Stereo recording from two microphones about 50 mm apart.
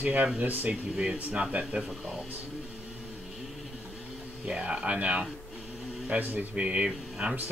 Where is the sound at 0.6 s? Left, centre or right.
Right.